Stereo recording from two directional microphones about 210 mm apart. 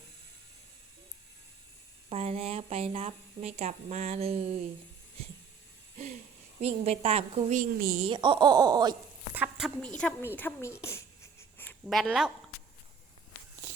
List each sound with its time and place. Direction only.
2.0 s speech: 30° right (ahead or behind)
6.6 s speech: 30° right (ahead or behind)
7.6 s a woman's voice: 40° right (ahead or behind)
8.0 s speech: 25° right (ahead or behind)
9.3 s a sound: 5° right (ahead or behind)
10.0 s a woman's voice: 10° left (ahead or behind)
10.8 s writing: 15° left (ahead or behind)